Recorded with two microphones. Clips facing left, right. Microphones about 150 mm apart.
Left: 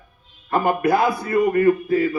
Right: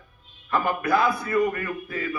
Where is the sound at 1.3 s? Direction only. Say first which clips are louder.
Left 8 dB; 35° left (ahead or behind).